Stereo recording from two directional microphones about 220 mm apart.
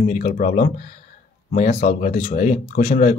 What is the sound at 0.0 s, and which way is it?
Speech, 35° left (ahead or behind).